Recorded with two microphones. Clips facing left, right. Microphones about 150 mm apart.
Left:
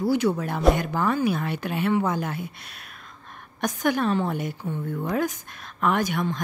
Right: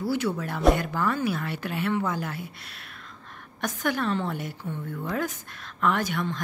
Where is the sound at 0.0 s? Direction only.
15° left (ahead or behind).